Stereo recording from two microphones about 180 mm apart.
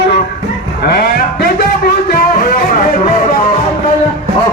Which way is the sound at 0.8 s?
60° left (ahead or behind).